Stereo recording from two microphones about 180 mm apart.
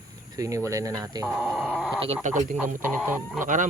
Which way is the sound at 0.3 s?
20° right (ahead or behind).